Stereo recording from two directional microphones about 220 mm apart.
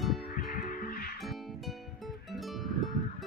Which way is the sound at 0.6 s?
40° left (ahead or behind).